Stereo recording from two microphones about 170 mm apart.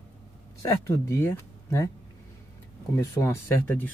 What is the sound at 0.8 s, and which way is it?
Speech, 15° left (ahead or behind).